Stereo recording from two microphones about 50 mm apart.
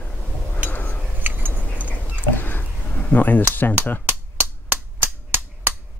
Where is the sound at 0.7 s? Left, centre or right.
Left.